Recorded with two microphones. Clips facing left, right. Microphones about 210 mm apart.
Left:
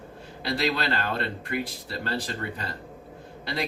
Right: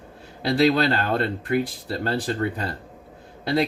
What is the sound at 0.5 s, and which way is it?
Speech, 40° right (ahead or behind).